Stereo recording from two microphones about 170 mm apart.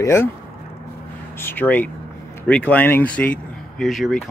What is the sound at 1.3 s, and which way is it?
Speech, 10° left (ahead or behind).